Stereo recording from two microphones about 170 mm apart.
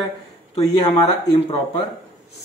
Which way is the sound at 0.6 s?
25° left (ahead or behind).